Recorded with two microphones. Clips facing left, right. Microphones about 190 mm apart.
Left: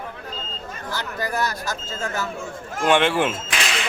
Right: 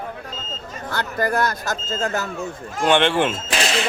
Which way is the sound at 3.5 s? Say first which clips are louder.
Right 5 dB; 35° right (ahead or behind).